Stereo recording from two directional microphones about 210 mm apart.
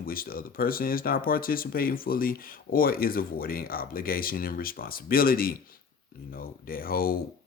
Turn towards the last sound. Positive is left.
turn(degrees=45)  # may be behind; listen again after turning